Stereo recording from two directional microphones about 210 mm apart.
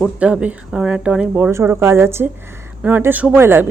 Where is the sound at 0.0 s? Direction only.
5° right (ahead or behind).